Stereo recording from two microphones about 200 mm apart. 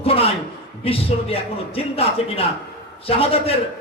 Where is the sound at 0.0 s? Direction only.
30° left (ahead or behind).